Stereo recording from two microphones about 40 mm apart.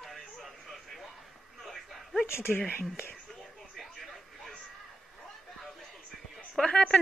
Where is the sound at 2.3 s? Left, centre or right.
Left.